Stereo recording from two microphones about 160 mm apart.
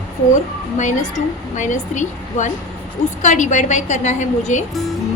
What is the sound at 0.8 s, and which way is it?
A woman's voice, 50° left (ahead or behind).